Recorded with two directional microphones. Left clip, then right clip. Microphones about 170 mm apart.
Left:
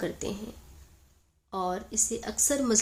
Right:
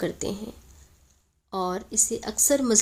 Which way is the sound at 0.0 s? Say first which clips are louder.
Right 4 dB; 35° right (ahead or behind).